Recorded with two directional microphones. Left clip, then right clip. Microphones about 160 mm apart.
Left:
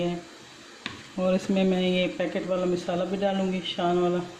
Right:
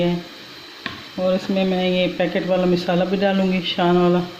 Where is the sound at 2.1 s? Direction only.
15° right (ahead or behind).